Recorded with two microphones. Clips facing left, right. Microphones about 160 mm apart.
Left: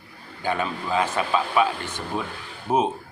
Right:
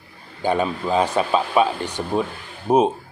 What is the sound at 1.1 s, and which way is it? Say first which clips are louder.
Speech: right 4 dB; 30° right (ahead or behind).